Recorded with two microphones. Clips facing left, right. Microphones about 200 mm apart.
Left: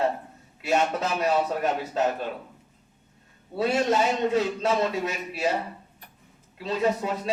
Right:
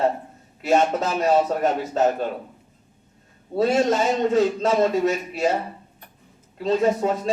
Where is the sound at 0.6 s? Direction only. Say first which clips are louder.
Right 5 dB; 45° right (ahead or behind).